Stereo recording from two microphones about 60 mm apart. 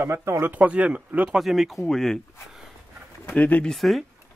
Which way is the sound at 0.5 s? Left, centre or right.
Right.